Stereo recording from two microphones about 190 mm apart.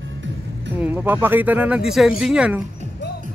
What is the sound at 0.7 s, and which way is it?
Speech, 10° right (ahead or behind).